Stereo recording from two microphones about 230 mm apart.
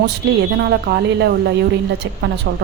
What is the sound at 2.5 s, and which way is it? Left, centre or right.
Speech, right.